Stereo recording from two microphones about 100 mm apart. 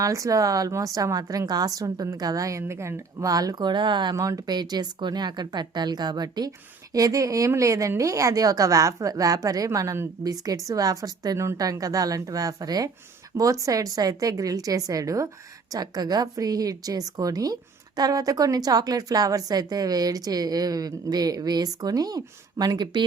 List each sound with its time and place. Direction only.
0.0 s a woman's voice: 35° right (ahead or behind); by 4.2 s 50° right (ahead or behind)
4.2 s a woman's voice: 35° right (ahead or behind)